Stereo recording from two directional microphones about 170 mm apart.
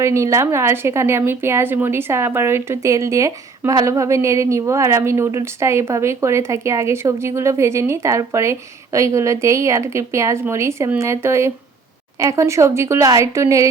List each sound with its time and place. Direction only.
0.0 s a woman's voice: 15° right (ahead or behind)